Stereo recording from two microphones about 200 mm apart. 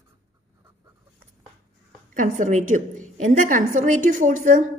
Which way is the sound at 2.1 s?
40° right (ahead or behind).